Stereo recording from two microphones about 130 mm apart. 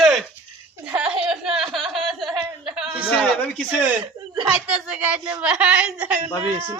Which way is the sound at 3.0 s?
10° left (ahead or behind).